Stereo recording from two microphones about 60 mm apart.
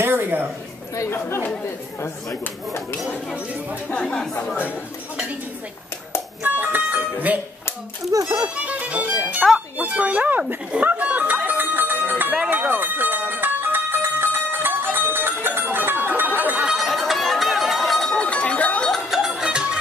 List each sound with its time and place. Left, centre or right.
0.0 s a woman's voice: right
1.1 s speech: left
2.0 s speech: left
3.9 s speech: centre
6.4 s music: right
8.1 s speech: right
8.6 s speech: right
9.4 s speech: centre
9.8 s speech: right
10.9 s music: right
16.3 s a sound: right
16.6 s a sound: centre
18.1 s a sound: centre
19.0 s music: centre